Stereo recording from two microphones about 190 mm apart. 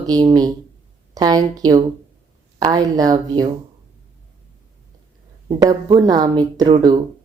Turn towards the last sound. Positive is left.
turn(degrees=-20)  # may be behind; listen again after turning